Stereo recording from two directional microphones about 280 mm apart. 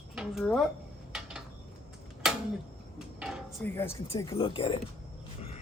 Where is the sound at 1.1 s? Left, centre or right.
Centre.